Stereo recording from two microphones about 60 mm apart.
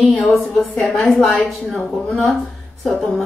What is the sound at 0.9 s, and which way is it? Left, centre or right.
Speech, centre.